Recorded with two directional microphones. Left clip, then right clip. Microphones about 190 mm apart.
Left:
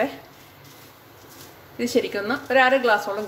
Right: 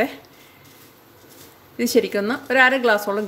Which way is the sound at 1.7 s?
45° right (ahead or behind).